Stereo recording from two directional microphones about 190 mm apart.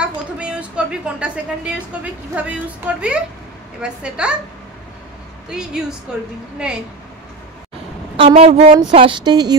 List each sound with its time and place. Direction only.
0.0 s a sound: 5° right (ahead or behind)
2.3 s a woman's voice: 5° right (ahead or behind)
5.5 s a woman's voice: 5° right (ahead or behind)
8.2 s a woman's voice: 35° right (ahead or behind)